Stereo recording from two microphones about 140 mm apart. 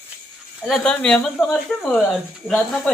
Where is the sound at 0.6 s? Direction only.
5° left (ahead or behind).